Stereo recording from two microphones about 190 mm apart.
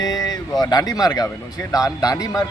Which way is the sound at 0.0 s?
20° left (ahead or behind).